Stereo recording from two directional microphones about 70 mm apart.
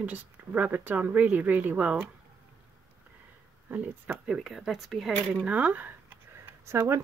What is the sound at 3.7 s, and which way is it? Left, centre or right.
Speech, right.